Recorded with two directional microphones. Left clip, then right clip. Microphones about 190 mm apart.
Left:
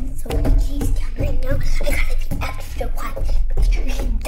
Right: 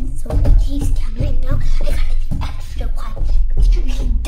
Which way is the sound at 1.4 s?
5° right (ahead or behind).